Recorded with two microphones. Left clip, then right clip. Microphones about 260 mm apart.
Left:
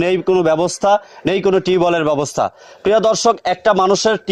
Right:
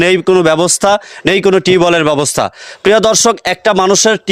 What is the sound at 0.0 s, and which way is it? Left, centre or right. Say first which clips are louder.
A man's voice: right 5 dB; right.